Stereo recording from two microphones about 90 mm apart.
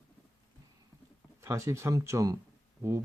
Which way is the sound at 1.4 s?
30° right (ahead or behind).